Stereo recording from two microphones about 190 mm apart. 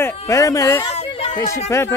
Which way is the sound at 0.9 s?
30° left (ahead or behind).